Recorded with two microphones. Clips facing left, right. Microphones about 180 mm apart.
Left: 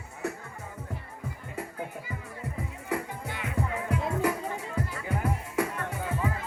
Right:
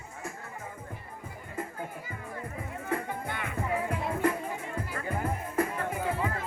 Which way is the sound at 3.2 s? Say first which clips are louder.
Right 1 dB; 55° right (ahead or behind).